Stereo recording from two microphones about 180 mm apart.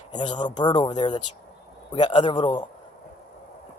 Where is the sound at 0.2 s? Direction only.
25° left (ahead or behind).